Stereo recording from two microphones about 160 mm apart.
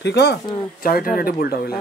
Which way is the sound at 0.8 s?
65° left (ahead or behind).